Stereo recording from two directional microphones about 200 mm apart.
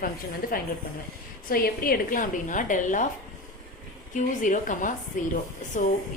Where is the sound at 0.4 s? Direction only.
45° left (ahead or behind).